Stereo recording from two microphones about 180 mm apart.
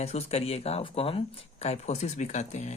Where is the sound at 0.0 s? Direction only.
35° left (ahead or behind).